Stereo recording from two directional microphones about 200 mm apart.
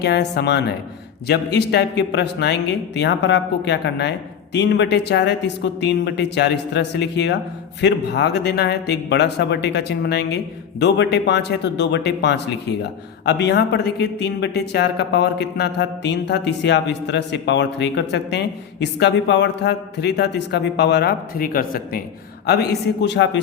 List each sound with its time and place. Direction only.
0.0 s a woman's voice: 55° left (ahead or behind)